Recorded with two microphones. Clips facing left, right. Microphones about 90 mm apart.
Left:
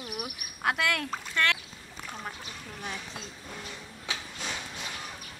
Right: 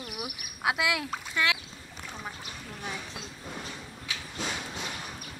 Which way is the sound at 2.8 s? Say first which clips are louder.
Even; centre (ahead or behind).